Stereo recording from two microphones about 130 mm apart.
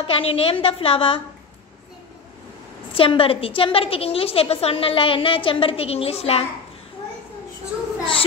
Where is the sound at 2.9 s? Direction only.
45° left (ahead or behind).